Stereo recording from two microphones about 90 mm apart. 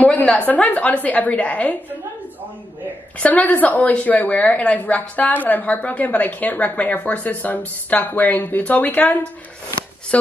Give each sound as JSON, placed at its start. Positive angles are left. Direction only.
{"t": 0.0, "sound": "a sound", "side_deg": 15}
{"t": 0.5, "sound": "a woman's voice", "side_deg": 15}
{"t": 3.2, "sound": "a woman's voice", "side_deg": 15}